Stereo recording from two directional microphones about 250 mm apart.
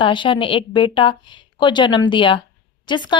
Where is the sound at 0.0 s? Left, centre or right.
Centre.